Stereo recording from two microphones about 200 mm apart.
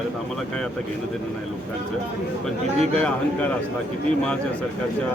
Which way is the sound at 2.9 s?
5° left (ahead or behind).